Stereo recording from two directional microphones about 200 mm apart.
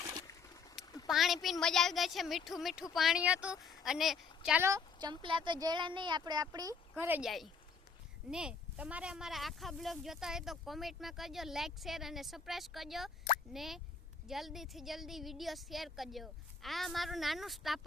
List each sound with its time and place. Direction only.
0.0 s a sound: 15° right (ahead or behind)
1.0 s speech: centre (ahead or behind)
4.6 s speech: 20° right (ahead or behind); by 17.7 s centre (ahead or behind)